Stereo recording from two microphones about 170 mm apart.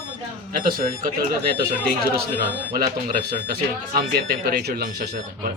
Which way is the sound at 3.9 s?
65° right (ahead or behind).